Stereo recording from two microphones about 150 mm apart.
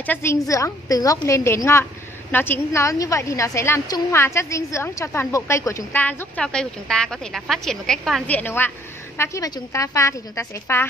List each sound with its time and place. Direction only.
0.0 s a woman's voice: 15° left (ahead or behind)